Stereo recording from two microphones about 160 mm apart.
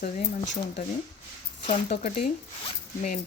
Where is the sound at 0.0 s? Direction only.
65° left (ahead or behind).